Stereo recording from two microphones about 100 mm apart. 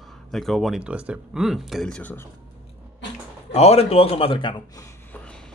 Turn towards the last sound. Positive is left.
turn(degrees=10)  # may be behind; listen again after turning